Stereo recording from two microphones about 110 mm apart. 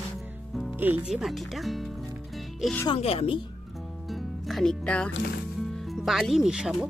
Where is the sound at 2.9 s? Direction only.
65° left (ahead or behind).